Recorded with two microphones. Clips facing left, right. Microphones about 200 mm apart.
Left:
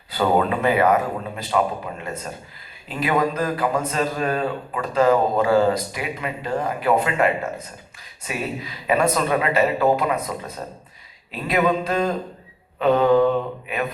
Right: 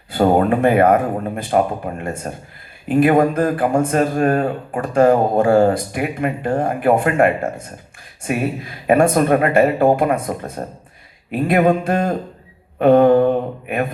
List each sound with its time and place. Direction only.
0.1 s a man's voice: 50° right (ahead or behind)